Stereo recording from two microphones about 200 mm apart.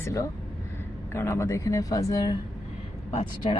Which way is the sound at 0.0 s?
15° left (ahead or behind).